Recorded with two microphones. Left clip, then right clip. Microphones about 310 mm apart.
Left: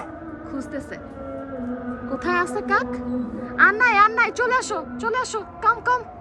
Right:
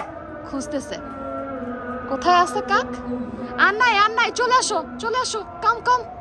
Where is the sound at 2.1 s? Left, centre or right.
Centre.